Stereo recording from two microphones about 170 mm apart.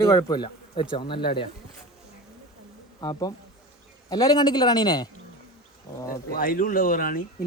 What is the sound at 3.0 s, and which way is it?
Speech, 25° left (ahead or behind).